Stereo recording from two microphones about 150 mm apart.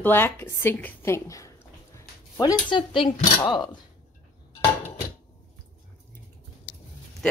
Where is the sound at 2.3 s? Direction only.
30° left (ahead or behind).